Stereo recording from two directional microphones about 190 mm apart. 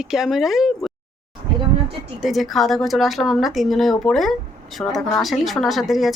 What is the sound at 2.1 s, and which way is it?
Speech, centre (ahead or behind).